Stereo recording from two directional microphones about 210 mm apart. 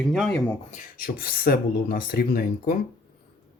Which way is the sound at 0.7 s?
45° left (ahead or behind).